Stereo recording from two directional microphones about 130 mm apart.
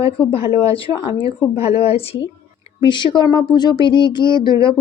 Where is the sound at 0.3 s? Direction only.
45° left (ahead or behind).